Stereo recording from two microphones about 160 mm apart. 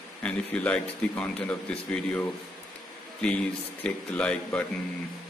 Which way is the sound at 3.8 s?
10° left (ahead or behind).